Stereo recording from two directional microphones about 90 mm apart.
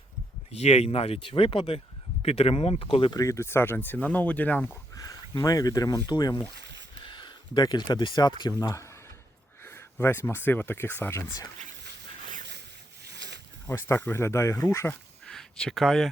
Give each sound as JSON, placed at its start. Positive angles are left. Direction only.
{"t": 0.9, "sound": "speech", "side_deg": 90}
{"t": 3.1, "sound": "speech", "side_deg": 40}
{"t": 5.4, "sound": "speech", "side_deg": 40}
{"t": 8.6, "sound": "speech", "side_deg": 35}
{"t": 9.6, "sound": "speech", "side_deg": 25}
{"t": 13.7, "sound": "speech", "side_deg": 25}
{"t": 15.3, "sound": "speech", "side_deg": 5}